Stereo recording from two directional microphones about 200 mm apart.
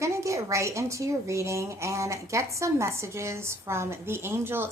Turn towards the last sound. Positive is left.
turn(degrees=-10)  # may be behind; listen again after turning